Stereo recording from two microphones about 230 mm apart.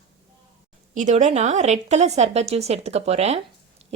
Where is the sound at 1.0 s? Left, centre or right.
Right.